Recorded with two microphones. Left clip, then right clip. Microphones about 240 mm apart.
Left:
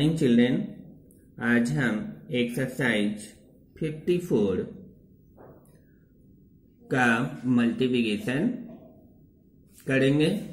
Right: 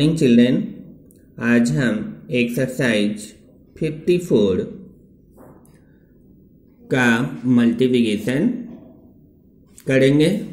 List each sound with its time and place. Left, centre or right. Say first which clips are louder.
0.0 s speech: right 7 dB; centre
6.9 s speech: right 6 dB; centre
9.8 s speech: right 8 dB; centre